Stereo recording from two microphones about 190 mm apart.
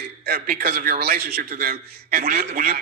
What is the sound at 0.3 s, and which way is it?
A man's voice, 50° right (ahead or behind).